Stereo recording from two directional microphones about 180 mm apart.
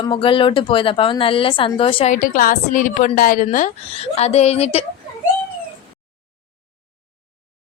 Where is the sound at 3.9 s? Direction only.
35° left (ahead or behind).